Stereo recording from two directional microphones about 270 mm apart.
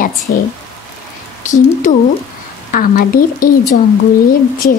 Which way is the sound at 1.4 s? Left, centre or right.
Left.